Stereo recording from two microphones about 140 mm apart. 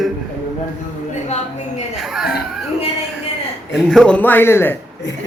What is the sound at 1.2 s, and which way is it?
Speech, 55° left (ahead or behind).